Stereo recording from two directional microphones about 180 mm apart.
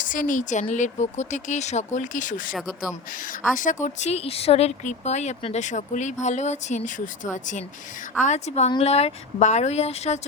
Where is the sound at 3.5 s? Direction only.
45° left (ahead or behind).